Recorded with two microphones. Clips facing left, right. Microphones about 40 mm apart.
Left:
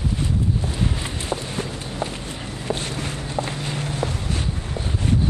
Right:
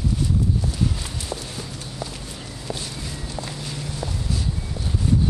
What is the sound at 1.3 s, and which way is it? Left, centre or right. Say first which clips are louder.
Clip-clop: left 5 dB; left.